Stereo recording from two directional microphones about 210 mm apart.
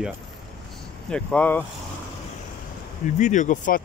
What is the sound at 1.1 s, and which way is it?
Speech, 5° left (ahead or behind).